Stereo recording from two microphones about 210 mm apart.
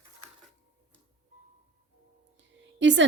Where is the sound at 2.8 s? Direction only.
60° right (ahead or behind).